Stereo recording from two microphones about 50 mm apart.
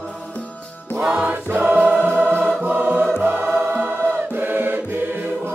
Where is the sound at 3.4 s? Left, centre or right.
Centre.